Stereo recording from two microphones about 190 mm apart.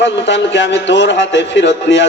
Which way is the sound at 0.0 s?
70° left (ahead or behind).